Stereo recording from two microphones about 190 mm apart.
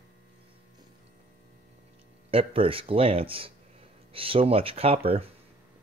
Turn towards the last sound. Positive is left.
turn(degrees=-30)  # may be behind; listen again after turning